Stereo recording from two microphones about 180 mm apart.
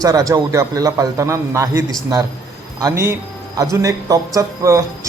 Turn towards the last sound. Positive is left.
turn(degrees=-15)  # may be behind; listen again after turning